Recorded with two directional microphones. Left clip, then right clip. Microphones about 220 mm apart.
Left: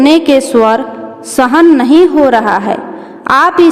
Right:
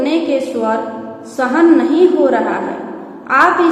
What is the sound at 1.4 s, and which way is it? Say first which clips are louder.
A woman's voice: left 4 dB; 50° left (ahead or behind).